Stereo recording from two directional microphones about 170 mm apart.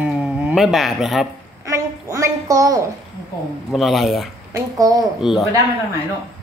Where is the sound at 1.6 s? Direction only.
20° right (ahead or behind).